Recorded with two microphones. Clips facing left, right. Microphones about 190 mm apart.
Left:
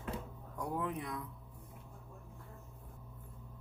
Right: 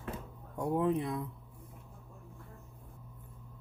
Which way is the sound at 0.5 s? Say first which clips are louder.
Right 8 dB; 25° right (ahead or behind).